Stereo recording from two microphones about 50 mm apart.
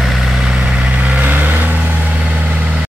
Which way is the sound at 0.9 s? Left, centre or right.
Right.